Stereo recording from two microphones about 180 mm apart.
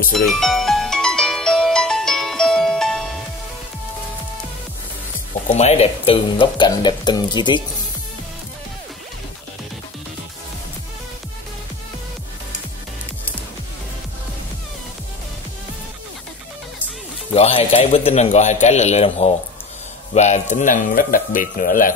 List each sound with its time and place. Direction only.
0.1 s music: centre (ahead or behind)
5.5 s speech: 35° left (ahead or behind)
17.3 s a man's voice: 30° left (ahead or behind); by 21.9 s 50° left (ahead or behind)